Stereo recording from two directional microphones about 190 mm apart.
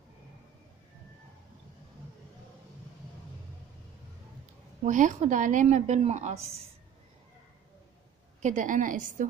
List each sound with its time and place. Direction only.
4.8 s a woman's voice: 40° right (ahead or behind)
8.4 s a woman's voice: 40° right (ahead or behind)